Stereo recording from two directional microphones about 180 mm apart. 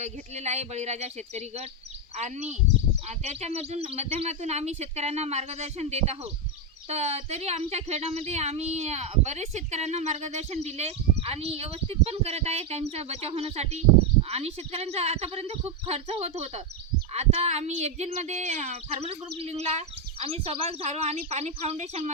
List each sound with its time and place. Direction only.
0.0 s speech: 40° right (ahead or behind)